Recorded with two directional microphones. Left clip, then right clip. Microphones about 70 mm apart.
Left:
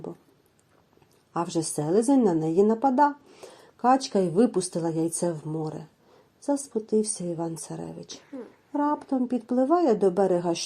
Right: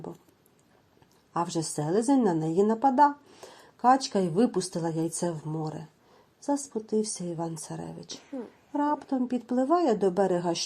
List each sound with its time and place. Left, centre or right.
1.3 s a woman's voice: left
8.7 s speech: centre
9.6 s a woman's voice: left